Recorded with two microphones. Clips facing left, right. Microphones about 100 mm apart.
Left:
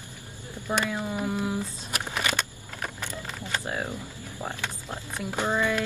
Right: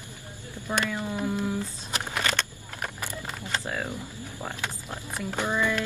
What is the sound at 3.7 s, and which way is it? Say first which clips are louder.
Speech: left 2 dB; 20° left (ahead or behind).